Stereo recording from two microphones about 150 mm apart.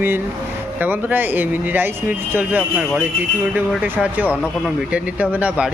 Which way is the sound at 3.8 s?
10° right (ahead or behind).